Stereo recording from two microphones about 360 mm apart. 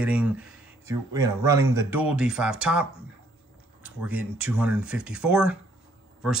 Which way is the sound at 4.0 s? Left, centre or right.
Centre.